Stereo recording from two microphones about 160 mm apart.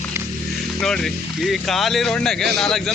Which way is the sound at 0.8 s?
5° left (ahead or behind).